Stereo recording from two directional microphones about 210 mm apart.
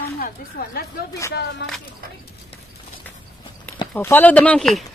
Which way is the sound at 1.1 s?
15° left (ahead or behind).